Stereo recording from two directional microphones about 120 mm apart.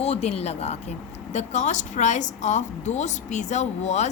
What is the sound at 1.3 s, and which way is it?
A woman's voice, 75° left (ahead or behind).